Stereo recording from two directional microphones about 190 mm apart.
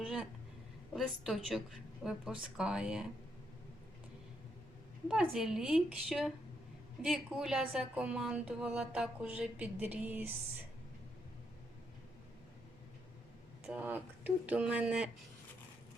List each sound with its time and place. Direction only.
0.0 s a woman's voice: centre (ahead or behind)
5.0 s a woman's voice: 5° right (ahead or behind)
13.7 s speech: 10° right (ahead or behind)